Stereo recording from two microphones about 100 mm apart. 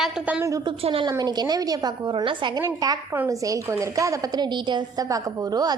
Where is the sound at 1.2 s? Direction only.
45° right (ahead or behind).